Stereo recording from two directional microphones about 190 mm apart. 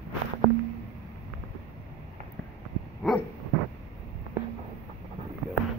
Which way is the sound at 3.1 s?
Centre (ahead or behind).